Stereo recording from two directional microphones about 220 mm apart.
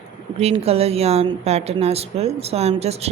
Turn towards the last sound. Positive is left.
turn(degrees=-30)  # may be behind; listen again after turning